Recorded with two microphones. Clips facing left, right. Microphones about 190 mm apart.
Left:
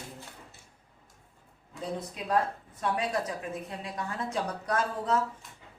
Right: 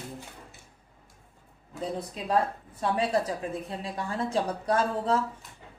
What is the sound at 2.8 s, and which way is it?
A woman's voice, 30° right (ahead or behind).